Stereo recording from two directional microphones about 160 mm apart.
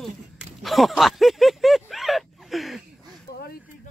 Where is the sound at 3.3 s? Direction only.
70° left (ahead or behind).